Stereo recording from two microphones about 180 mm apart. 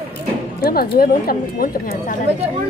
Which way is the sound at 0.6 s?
55° left (ahead or behind).